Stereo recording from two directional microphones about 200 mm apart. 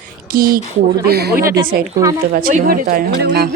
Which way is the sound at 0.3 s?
45° right (ahead or behind).